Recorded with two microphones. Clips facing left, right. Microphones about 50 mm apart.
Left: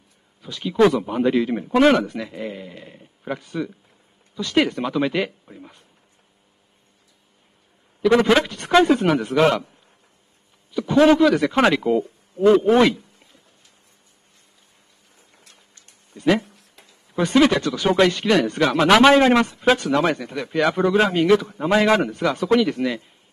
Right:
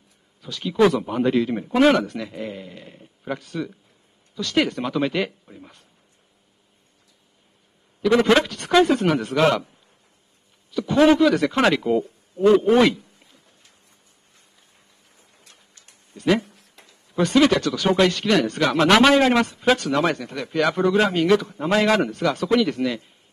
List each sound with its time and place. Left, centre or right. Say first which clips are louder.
0.4 s speech: left 1 dB; centre
8.0 s speech: left 1 dB; centre
10.7 s speech: left 1 dB; centre
16.2 s speech: left 1 dB; centre
19.1 s speech: left 2 dB; centre
19.6 s speech: left 1 dB; centre